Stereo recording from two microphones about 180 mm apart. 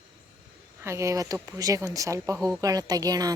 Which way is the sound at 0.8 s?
15° right (ahead or behind).